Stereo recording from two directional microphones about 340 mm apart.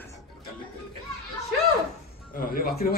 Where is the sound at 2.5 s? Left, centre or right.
Left.